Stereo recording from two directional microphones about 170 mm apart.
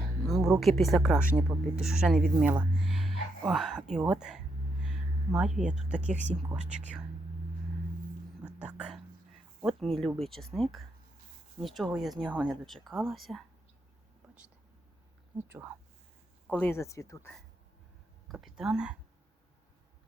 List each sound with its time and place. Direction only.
0.3 s a sound: centre (ahead or behind)
0.6 s speech: centre (ahead or behind)
6.1 s speech: 45° right (ahead or behind)
8.4 s whispering: 5° right (ahead or behind)
9.6 s speech: centre (ahead or behind)
15.4 s speech: 10° right (ahead or behind)
16.5 s speech: 10° left (ahead or behind)
18.3 s speech: centre (ahead or behind)